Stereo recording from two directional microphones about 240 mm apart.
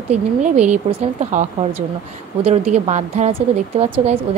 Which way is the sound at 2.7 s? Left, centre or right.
Right.